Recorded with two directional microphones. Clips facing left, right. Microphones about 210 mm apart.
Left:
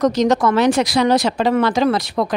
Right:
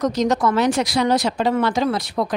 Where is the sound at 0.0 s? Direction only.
90° left.